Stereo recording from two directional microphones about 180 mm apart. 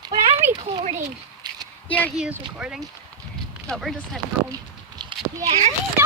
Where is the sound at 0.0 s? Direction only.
25° right (ahead or behind).